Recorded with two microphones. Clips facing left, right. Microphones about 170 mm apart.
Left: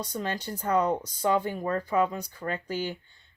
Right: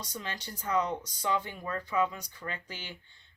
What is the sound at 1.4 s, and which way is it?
Speech, 40° left (ahead or behind).